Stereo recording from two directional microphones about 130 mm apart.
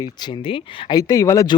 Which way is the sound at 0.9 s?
25° left (ahead or behind).